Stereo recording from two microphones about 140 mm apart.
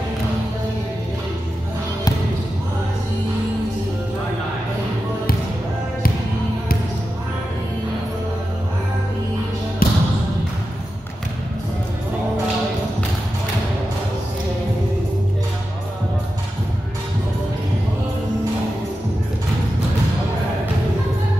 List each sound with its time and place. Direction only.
9.8 s basketball bounce: 90° left